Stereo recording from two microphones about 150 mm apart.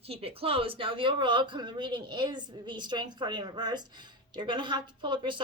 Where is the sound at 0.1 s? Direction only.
40° right (ahead or behind).